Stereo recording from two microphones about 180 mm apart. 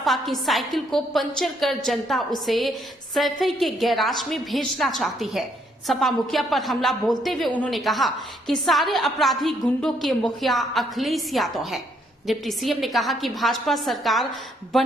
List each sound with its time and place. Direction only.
0.0 s a woman's voice: centre (ahead or behind)